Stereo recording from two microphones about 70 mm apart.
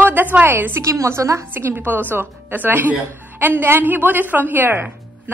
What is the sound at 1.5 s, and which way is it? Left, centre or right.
Speech, right.